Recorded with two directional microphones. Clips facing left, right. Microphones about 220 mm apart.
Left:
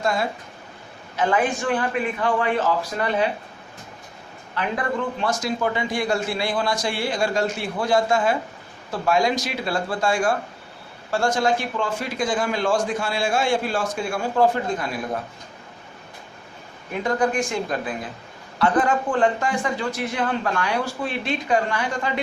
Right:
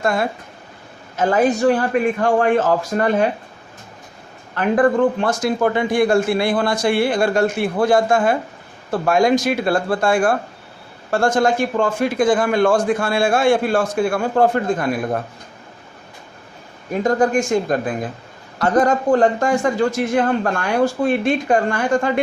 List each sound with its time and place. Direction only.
0.0 s a man's voice: 55° right (ahead or behind)
1.1 s a man's voice: 40° right (ahead or behind)
4.5 s a man's voice: 50° right (ahead or behind)
16.9 s a man's voice: 40° right (ahead or behind)